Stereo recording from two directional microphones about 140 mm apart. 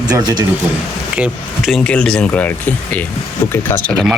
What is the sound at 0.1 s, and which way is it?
Speech, 30° right (ahead or behind).